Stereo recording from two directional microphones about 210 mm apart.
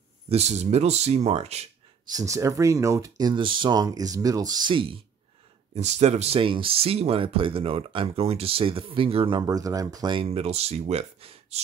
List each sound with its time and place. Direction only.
0.3 s speech: 30° right (ahead or behind)
2.0 s speech: 15° right (ahead or behind)